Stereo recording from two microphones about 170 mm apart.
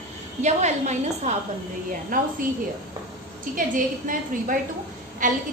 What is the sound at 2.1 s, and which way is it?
Speech, 55° right (ahead or behind).